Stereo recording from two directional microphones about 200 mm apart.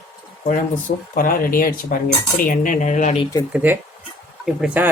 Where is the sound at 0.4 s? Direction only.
45° left (ahead or behind).